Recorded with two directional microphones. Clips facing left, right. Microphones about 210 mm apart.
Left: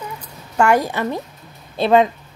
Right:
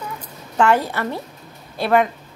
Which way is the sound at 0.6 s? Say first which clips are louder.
Left 1 dB; 10° left (ahead or behind).